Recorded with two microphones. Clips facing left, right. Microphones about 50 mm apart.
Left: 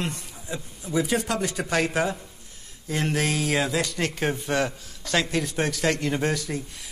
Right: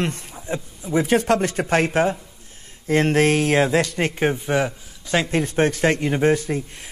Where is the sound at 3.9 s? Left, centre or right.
Right.